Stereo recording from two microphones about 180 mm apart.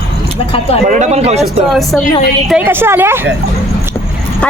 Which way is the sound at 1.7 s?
Centre (ahead or behind).